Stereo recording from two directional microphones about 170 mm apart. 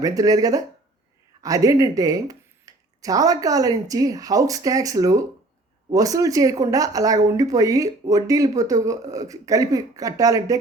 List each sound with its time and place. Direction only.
0.0 s speech: 20° right (ahead or behind)